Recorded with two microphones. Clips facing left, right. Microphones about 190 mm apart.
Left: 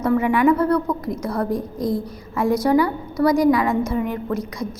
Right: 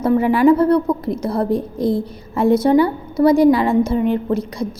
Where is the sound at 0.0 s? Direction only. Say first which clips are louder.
Right 4 dB; 30° right (ahead or behind).